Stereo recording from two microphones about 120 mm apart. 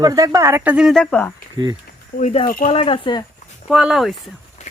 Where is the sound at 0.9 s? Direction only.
15° left (ahead or behind).